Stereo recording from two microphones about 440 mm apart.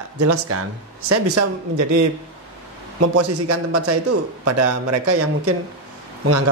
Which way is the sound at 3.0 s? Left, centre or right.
Right.